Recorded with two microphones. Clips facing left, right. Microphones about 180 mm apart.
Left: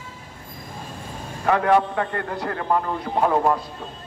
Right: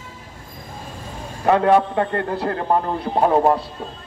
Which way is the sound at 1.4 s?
25° right (ahead or behind).